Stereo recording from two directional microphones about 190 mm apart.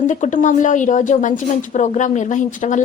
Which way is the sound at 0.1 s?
40° left (ahead or behind).